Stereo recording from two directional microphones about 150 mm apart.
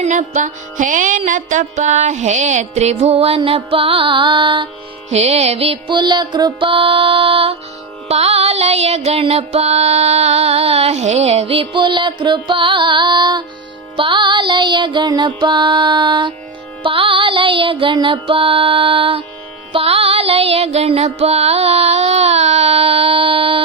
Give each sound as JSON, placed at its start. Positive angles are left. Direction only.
{"t": 0.0, "sound": "music", "side_deg": -55}
{"t": 5.0, "sound": "music", "side_deg": -45}